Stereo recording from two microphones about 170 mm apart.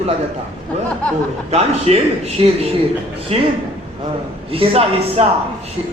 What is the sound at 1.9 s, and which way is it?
Speech, 40° right (ahead or behind).